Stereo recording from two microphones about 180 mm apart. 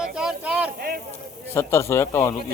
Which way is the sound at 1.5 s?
15° left (ahead or behind).